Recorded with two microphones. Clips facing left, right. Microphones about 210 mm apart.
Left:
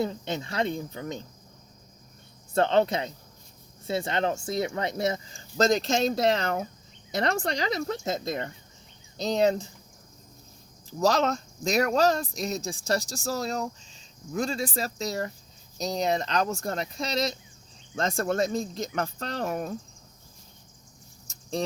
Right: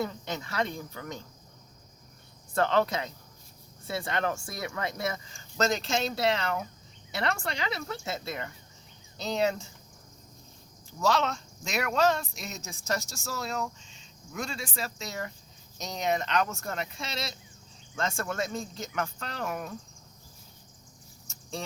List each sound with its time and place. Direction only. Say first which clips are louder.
0.0 s speech: left 4 dB; 25° left (ahead or behind)
2.6 s speech: left 3 dB; 25° left (ahead or behind)
11.0 s speech: left 4 dB; 40° left (ahead or behind)